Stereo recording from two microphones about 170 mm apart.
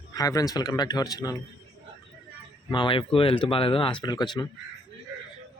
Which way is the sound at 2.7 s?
30° left (ahead or behind).